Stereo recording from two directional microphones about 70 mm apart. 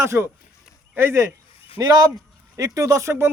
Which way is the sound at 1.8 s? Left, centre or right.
Right.